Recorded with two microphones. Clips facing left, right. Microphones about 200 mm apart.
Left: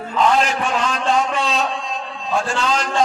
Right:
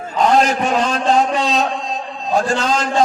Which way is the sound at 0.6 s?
40° right (ahead or behind).